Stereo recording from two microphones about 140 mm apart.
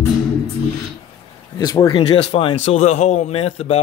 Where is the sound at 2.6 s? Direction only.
50° left (ahead or behind).